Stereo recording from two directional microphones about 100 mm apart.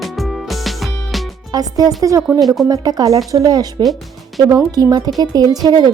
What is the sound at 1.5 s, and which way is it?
A woman's voice, 40° right (ahead or behind).